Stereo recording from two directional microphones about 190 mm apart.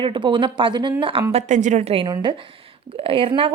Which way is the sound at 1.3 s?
40° right (ahead or behind).